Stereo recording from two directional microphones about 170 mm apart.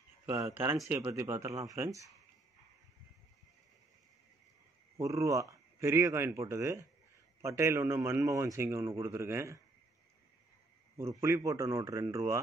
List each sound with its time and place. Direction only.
0.8 s speech: 15° right (ahead or behind)
4.9 s speech: 20° right (ahead or behind)
11.0 s speech: 15° right (ahead or behind)